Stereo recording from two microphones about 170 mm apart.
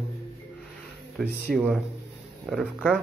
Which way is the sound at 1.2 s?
Centre (ahead or behind).